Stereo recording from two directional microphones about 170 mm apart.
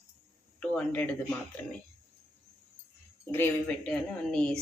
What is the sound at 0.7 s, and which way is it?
Speech, 5° left (ahead or behind).